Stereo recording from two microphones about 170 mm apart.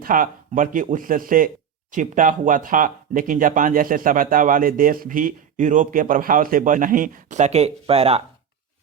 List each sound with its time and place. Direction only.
0.0 s speech: 55° right (ahead or behind); by 8.2 s 35° right (ahead or behind)